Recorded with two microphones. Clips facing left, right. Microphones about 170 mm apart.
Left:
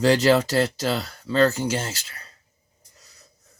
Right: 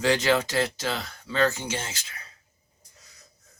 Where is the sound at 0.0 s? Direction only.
35° left (ahead or behind).